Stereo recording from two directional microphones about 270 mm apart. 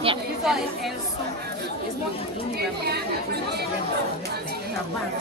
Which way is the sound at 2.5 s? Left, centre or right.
Right.